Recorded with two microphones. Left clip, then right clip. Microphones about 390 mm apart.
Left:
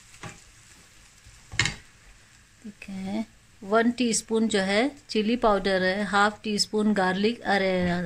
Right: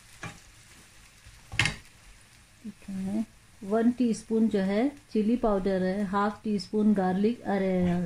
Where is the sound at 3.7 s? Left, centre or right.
Left.